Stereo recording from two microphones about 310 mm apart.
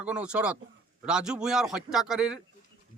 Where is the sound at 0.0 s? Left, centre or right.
Centre.